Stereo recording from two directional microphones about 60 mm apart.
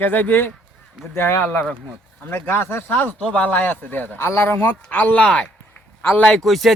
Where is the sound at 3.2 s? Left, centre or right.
Left.